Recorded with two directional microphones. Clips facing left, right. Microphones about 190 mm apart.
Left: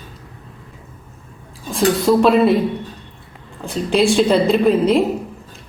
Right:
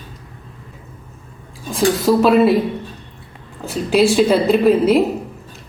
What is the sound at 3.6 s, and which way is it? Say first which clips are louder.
Speech: right 2 dB; 5° right (ahead or behind).